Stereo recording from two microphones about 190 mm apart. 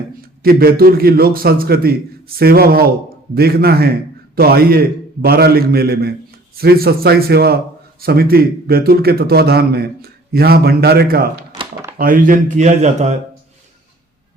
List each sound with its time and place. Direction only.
0.2 s a man's voice: 50° right (ahead or behind)